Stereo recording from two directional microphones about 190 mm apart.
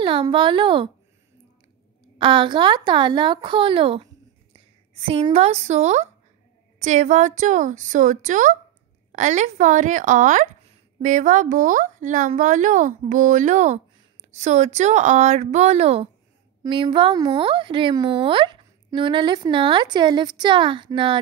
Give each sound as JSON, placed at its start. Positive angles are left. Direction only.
{"t": 0.0, "sound": "a child's voice", "side_deg": -25}
{"t": 2.1, "sound": "speech", "side_deg": -25}